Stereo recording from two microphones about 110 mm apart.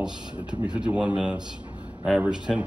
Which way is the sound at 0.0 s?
10° right (ahead or behind).